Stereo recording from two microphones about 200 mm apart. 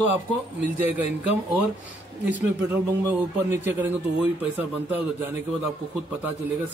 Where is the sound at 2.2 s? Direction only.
10° right (ahead or behind).